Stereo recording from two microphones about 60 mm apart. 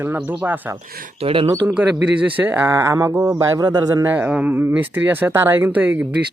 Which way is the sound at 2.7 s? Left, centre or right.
Right.